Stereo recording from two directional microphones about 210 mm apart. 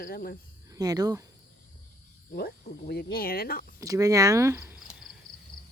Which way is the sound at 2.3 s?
45° left (ahead or behind).